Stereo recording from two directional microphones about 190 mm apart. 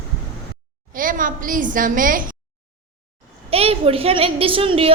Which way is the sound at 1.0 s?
45° right (ahead or behind).